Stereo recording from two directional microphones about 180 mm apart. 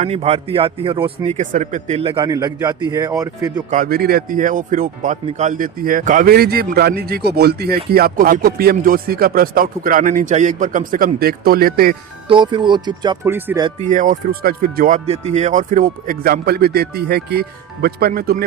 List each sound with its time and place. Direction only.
0.0 s speech: 35° right (ahead or behind); by 3.6 s 20° right (ahead or behind)
3.7 s speech: 55° right (ahead or behind)
12.3 s speech: 25° right (ahead or behind)
13.2 s speech: 10° right (ahead or behind)
13.8 s speech: 45° right (ahead or behind)